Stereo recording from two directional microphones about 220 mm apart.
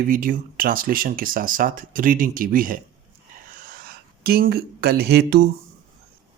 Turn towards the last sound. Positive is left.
turn(degrees=-45)  # may be behind; listen again after turning